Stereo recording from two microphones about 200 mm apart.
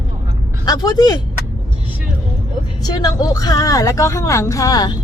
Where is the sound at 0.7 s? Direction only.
20° left (ahead or behind).